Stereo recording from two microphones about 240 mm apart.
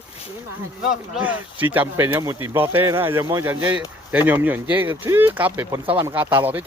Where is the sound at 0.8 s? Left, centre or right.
Centre.